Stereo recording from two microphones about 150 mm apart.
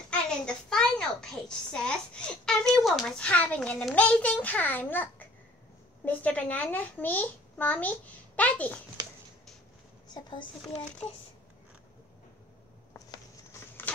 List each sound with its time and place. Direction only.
0.1 s a child's voice: 5° left (ahead or behind)
10.0 s a child's voice: 30° left (ahead or behind)
12.9 s a sound: 20° left (ahead or behind)